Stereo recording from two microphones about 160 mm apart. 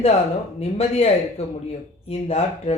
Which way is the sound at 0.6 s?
40° left (ahead or behind).